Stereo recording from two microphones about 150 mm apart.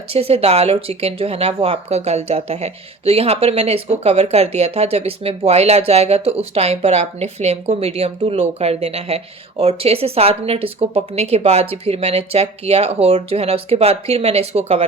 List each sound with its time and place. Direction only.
0.1 s speech: 40° right (ahead or behind)